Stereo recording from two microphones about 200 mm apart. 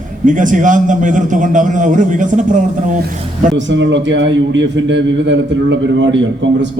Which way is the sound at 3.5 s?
65° right (ahead or behind).